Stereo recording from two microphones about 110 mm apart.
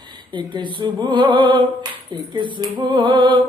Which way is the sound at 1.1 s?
45° right (ahead or behind).